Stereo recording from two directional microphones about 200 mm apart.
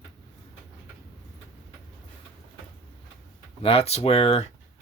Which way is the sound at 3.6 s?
30° left (ahead or behind).